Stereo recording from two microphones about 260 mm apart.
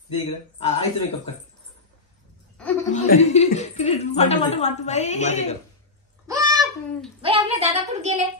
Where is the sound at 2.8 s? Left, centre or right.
Left.